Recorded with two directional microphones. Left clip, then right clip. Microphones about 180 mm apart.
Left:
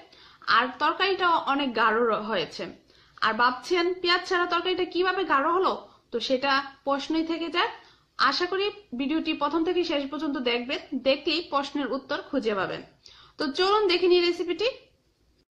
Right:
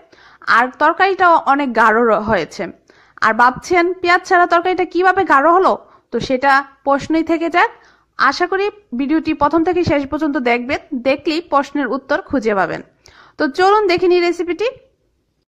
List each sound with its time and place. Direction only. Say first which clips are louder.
0.5 s a woman's voice: right 10 dB; 45° right (ahead or behind)